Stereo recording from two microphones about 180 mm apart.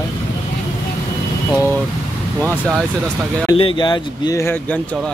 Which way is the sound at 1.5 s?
10° left (ahead or behind).